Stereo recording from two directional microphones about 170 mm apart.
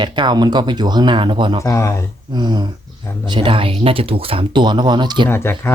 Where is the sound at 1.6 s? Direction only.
15° left (ahead or behind).